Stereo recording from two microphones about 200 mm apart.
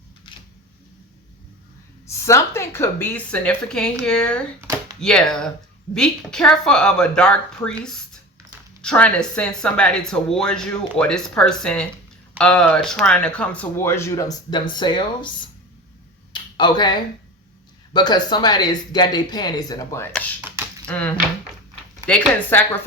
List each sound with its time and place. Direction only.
2.0 s speech: 15° left (ahead or behind)
8.8 s speech: 5° left (ahead or behind); by 15.3 s 25° left (ahead or behind)
16.3 s speech: 20° left (ahead or behind)
20.8 s speech: 5° left (ahead or behind)